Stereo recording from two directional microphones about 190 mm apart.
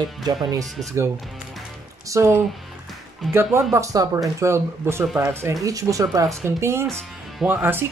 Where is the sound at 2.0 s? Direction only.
15° right (ahead or behind).